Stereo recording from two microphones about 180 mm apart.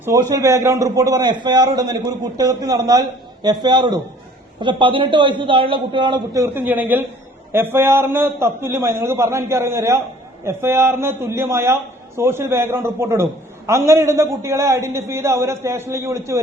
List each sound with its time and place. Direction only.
0.0 s a man's voice: 20° right (ahead or behind)